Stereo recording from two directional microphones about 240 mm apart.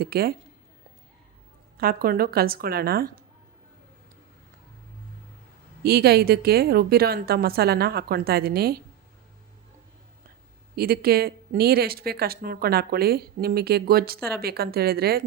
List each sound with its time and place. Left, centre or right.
0.0 s speech: right
1.8 s speech: right
5.8 s speech: right
10.8 s speech: right